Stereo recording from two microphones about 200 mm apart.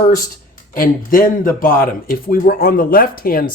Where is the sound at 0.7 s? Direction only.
45° left (ahead or behind).